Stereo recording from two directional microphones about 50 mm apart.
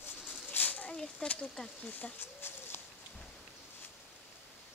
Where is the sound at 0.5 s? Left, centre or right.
Left.